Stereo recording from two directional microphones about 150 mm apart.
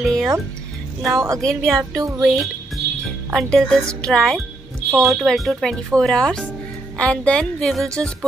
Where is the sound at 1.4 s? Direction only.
5° left (ahead or behind).